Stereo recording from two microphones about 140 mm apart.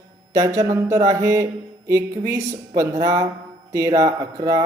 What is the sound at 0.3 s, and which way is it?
A woman's voice, 25° right (ahead or behind).